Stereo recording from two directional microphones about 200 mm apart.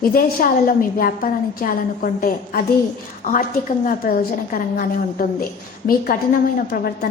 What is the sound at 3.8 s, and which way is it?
A woman's voice, 45° left (ahead or behind).